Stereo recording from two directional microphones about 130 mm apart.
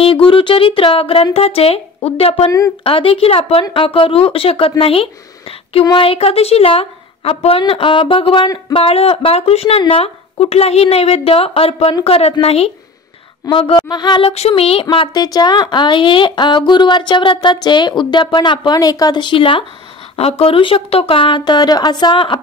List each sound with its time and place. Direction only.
0.0 s speech: 45° left (ahead or behind)
13.5 s a woman's voice: 40° left (ahead or behind)
14.3 s a woman's voice: 50° left (ahead or behind)